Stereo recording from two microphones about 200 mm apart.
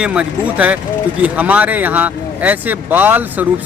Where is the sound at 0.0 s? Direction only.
5° right (ahead or behind).